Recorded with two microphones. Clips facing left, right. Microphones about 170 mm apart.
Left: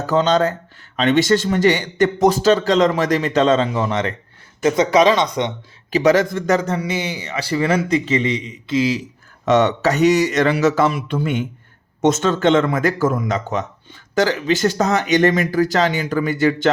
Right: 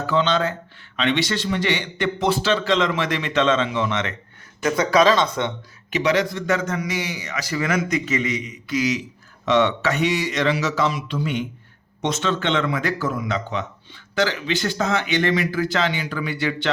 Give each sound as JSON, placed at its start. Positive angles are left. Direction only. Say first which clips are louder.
{"t": 0.0, "sound": "speech", "louder": "left 4 dB", "side_deg": 40}
{"t": 4.6, "sound": "a man's voice", "louder": "left 3 dB", "side_deg": 20}
{"t": 5.9, "sound": "a man's voice", "louder": "left 6 dB", "side_deg": 45}
{"t": 9.5, "sound": "speech", "louder": "left 4 dB", "side_deg": 45}